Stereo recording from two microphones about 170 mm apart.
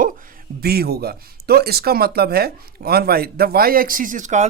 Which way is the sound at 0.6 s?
65° right (ahead or behind).